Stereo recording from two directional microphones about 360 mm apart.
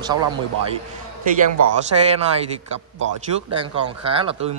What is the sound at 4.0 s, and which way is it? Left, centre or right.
Speech, centre.